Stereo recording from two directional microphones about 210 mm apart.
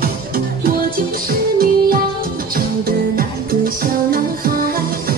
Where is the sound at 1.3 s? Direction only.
45° right (ahead or behind).